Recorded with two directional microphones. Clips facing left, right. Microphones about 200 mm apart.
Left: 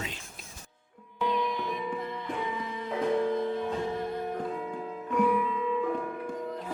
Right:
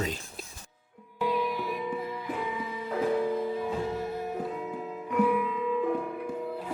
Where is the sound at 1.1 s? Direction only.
5° right (ahead or behind).